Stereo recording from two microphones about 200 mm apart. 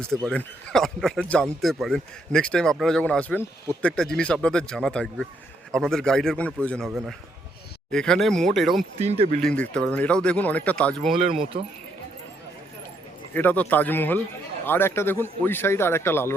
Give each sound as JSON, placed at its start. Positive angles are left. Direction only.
{"t": 0.3, "sound": "speech", "side_deg": 0}
{"t": 9.0, "sound": "speech", "side_deg": -30}
{"t": 9.4, "sound": "speech", "side_deg": 5}
{"t": 13.3, "sound": "a man's voice", "side_deg": 10}